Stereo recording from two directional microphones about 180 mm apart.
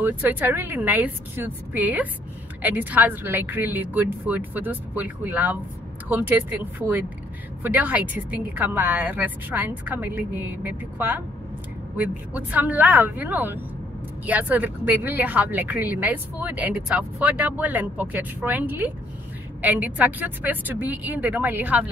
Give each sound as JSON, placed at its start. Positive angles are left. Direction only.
{"t": 0.0, "sound": "a woman's voice", "side_deg": -10}